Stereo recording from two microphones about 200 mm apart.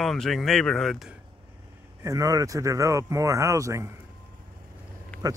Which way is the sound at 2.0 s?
15° right (ahead or behind).